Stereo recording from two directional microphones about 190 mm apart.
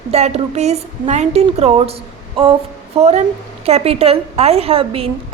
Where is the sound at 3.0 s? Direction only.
35° right (ahead or behind).